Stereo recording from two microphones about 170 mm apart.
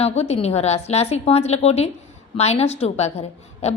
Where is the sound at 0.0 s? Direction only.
35° left (ahead or behind).